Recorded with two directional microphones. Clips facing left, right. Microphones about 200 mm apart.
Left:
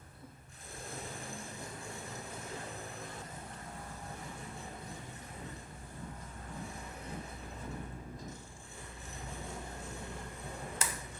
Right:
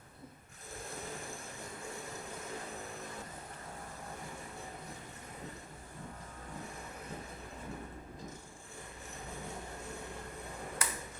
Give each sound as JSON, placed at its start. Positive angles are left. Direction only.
{"t": 10.8, "sound": "tick-tock", "side_deg": 25}